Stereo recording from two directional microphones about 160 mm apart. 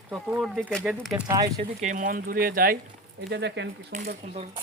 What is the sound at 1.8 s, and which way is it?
Speech, 55° right (ahead or behind).